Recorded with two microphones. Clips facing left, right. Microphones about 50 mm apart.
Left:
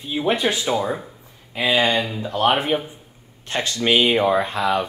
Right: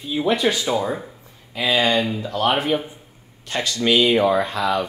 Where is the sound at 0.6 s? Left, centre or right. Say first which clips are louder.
Even; centre.